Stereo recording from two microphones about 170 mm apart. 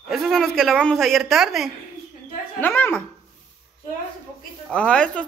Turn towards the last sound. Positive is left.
turn(degrees=5)  # may be behind; listen again after turning